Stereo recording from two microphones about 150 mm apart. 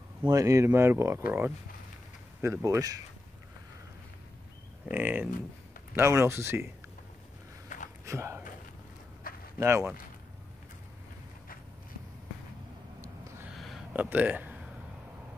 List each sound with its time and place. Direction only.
0.2 s speech: 20° right (ahead or behind)
2.4 s speech: 20° right (ahead or behind)
4.8 s speech: 10° right (ahead or behind)
8.0 s speech: 20° right (ahead or behind)
9.3 s a sound: 75° left (ahead or behind)
9.6 s speech: 20° right (ahead or behind)
13.0 s gasp: 20° right (ahead or behind)
13.5 s a sound: centre (ahead or behind)
13.9 s speech: 10° right (ahead or behind)